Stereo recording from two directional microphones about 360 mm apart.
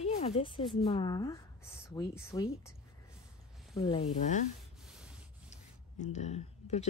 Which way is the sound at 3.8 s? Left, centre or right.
Centre.